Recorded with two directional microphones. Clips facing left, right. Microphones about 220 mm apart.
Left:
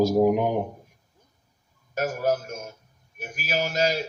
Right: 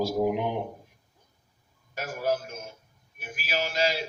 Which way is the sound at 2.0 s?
45° left (ahead or behind).